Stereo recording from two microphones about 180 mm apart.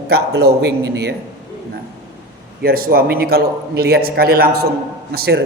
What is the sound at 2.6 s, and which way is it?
A man's voice, 55° right (ahead or behind).